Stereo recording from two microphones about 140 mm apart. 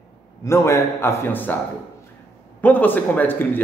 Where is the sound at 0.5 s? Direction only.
20° left (ahead or behind).